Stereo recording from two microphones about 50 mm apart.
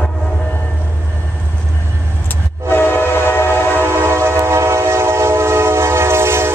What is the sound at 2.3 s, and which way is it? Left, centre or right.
Train, left.